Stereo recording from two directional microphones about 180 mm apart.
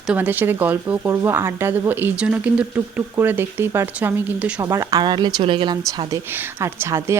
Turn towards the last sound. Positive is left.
turn(degrees=-15)  # may be behind; listen again after turning